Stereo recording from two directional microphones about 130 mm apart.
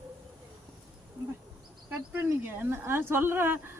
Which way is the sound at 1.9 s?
15° right (ahead or behind).